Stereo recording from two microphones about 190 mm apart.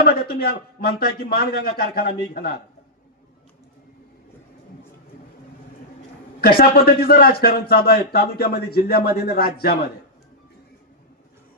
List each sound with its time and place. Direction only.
0.0 s speech: 55° left (ahead or behind)
6.4 s speech: 55° left (ahead or behind)